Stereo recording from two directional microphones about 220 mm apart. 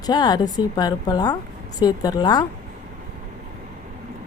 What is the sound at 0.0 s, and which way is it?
Speech, 20° left (ahead or behind).